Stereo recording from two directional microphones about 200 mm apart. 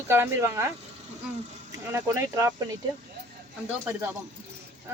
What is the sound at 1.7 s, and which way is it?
Speech, 15° right (ahead or behind).